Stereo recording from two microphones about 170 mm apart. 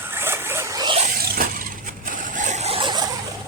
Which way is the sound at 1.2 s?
60° right (ahead or behind).